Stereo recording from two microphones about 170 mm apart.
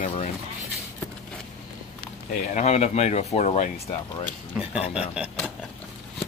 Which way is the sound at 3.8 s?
25° left (ahead or behind).